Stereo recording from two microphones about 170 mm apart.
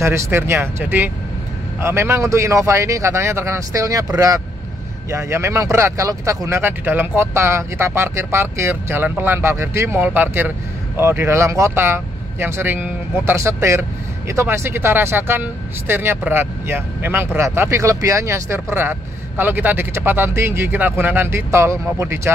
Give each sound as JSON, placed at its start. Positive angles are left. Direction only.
{"t": 0.0, "sound": "speech", "side_deg": -15}